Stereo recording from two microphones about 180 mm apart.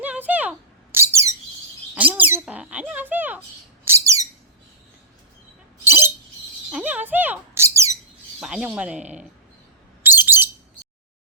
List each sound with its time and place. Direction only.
0.0 s a sound: 10° right (ahead or behind)
0.9 s bird: 15° right (ahead or behind)
2.0 s speech: 10° right (ahead or behind)
3.8 s bird: 15° right (ahead or behind)
5.8 s a sound: 10° right (ahead or behind)
6.7 s squawk: 5° right (ahead or behind)
8.4 s speech: 5° right (ahead or behind)
10.0 s bird: 10° right (ahead or behind)